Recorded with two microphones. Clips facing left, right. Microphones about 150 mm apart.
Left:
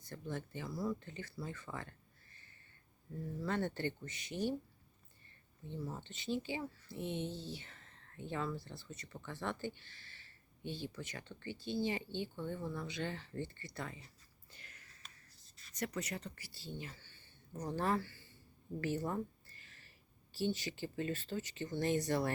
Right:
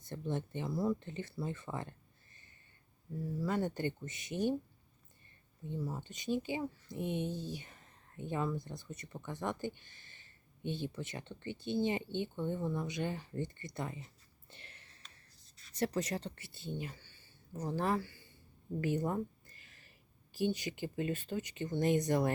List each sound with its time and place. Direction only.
0.0 s speech: 25° right (ahead or behind)
5.6 s speech: 10° right (ahead or behind)
14.5 s a sound: 30° right (ahead or behind)
15.7 s speech: 30° right (ahead or behind); by 18.3 s 15° right (ahead or behind)
18.8 s a sound: 15° right (ahead or behind)
20.3 s speech: 15° right (ahead or behind)